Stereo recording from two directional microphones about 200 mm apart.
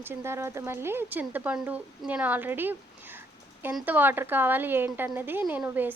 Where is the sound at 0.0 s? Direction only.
10° right (ahead or behind).